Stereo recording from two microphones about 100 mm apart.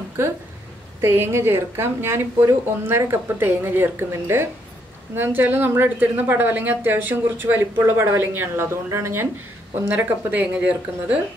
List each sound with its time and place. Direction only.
1.0 s a woman's voice: 25° right (ahead or behind)